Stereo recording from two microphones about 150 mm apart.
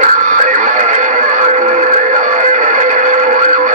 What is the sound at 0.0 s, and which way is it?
Radio, 55° right (ahead or behind).